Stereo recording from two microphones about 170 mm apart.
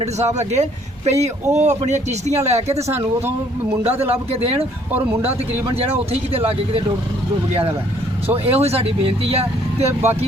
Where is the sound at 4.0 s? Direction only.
35° right (ahead or behind).